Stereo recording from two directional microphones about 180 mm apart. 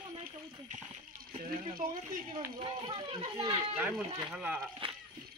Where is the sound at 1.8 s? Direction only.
45° right (ahead or behind).